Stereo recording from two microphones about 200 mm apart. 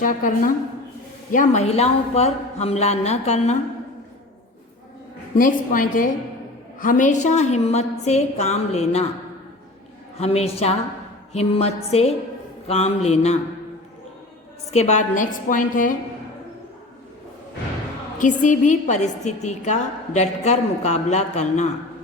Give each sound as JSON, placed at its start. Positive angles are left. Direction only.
{"t": 0.0, "sound": "a woman's voice", "side_deg": 40}
{"t": 5.4, "sound": "a woman's voice", "side_deg": 40}
{"t": 10.2, "sound": "a woman's voice", "side_deg": 30}
{"t": 14.7, "sound": "a woman's voice", "side_deg": 35}
{"t": 18.2, "sound": "a woman's voice", "side_deg": 40}